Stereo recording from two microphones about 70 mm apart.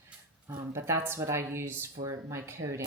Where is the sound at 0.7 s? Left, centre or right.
Right.